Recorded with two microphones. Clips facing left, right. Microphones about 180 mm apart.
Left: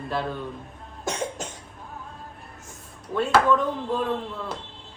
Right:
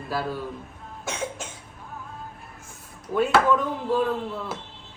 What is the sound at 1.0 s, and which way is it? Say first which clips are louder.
Cough: left 2 dB; 40° left (ahead or behind).